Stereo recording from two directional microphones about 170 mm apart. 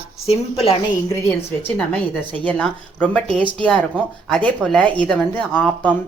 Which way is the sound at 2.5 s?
5° left (ahead or behind).